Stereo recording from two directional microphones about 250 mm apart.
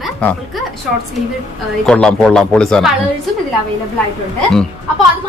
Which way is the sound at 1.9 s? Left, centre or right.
Centre.